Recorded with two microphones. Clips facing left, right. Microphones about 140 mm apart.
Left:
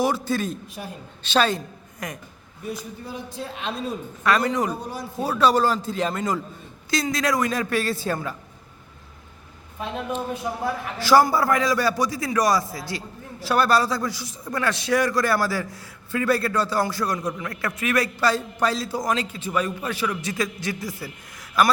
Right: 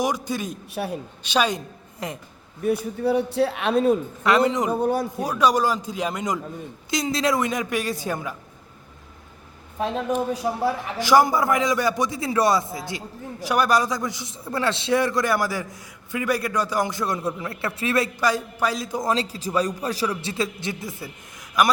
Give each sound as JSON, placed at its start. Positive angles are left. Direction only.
{"t": 0.0, "sound": "a woman's voice", "side_deg": -15}
{"t": 0.7, "sound": "speech", "side_deg": -70}
{"t": 1.2, "sound": "a woman's voice", "side_deg": -10}
{"t": 2.0, "sound": "a man's voice", "side_deg": -25}
{"t": 2.6, "sound": "speech", "side_deg": -65}
{"t": 4.2, "sound": "a man's voice", "side_deg": -20}
{"t": 4.7, "sound": "a man's voice", "side_deg": -55}
{"t": 5.2, "sound": "a woman's voice", "side_deg": -15}
{"t": 10.5, "sound": "a man's voice", "side_deg": -25}
{"t": 18.2, "sound": "a man's voice", "side_deg": -15}